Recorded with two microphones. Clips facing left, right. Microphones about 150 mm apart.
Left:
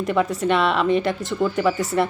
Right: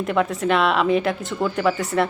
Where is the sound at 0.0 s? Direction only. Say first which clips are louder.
Even; centre (ahead or behind).